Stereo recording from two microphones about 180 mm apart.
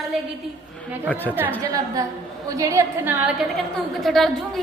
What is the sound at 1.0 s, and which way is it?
Speech, 10° left (ahead or behind).